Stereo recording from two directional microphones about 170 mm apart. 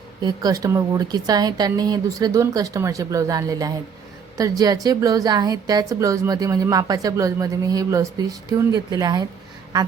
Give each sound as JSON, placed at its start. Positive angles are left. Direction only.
{"t": 0.2, "sound": "a woman's voice", "side_deg": -25}